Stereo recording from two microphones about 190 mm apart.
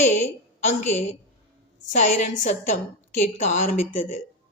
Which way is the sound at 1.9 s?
40° left (ahead or behind).